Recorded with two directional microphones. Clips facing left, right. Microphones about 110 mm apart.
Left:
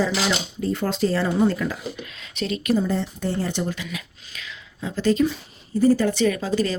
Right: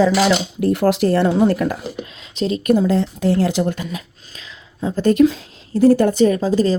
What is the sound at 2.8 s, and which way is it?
Speech, 90° right.